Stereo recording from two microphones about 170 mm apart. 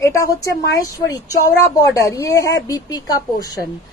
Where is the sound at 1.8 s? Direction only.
20° left (ahead or behind).